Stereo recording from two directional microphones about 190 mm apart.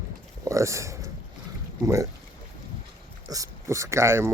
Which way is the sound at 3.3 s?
20° right (ahead or behind).